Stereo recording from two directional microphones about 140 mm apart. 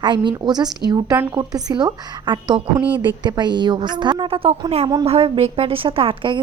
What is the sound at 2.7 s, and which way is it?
Speech, 10° right (ahead or behind).